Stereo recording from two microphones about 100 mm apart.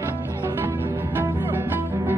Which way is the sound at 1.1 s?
20° right (ahead or behind).